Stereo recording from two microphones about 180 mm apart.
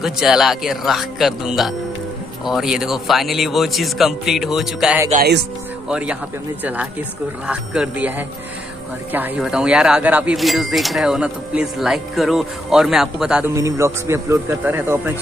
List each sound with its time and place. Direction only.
0.0 s a man's voice: centre (ahead or behind)
13.6 s a man's voice: 15° right (ahead or behind)